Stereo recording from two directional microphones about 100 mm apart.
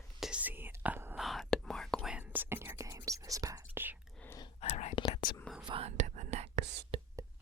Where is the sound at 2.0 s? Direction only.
15° right (ahead or behind); by 3.7 s 35° right (ahead or behind).